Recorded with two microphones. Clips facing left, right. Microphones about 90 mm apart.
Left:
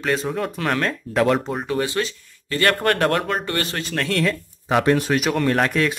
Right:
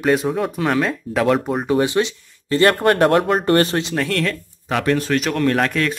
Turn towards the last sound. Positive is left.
turn(degrees=0)  # may be behind; listen again after turning